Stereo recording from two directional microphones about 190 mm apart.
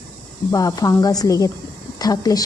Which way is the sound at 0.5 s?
20° left (ahead or behind).